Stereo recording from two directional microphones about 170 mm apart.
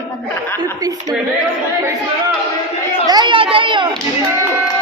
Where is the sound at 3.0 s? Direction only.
25° right (ahead or behind).